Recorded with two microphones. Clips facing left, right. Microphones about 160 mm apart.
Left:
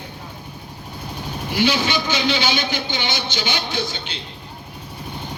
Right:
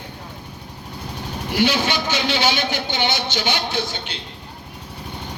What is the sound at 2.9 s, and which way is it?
Speech, 60° right (ahead or behind).